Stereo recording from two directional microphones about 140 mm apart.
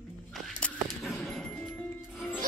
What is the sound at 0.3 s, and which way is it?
Music, 5° left (ahead or behind).